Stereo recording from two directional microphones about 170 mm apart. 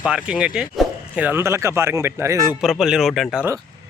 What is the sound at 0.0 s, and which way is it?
Speech, 5° right (ahead or behind).